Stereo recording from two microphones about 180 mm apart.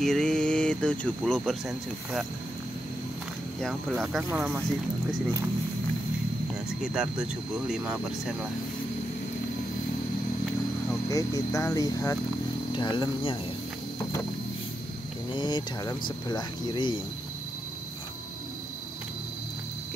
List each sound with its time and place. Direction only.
0.0 s speech: 5° left (ahead or behind)
4.2 s speech: 10° right (ahead or behind)
6.8 s speech: 5° right (ahead or behind)
11.1 s speech: 20° left (ahead or behind)
15.3 s speech: 25° left (ahead or behind)